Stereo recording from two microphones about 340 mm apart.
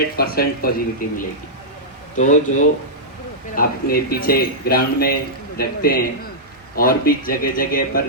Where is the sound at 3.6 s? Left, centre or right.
Left.